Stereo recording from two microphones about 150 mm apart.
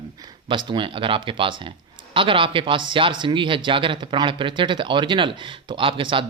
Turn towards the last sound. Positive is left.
turn(degrees=-35)  # may be behind; listen again after turning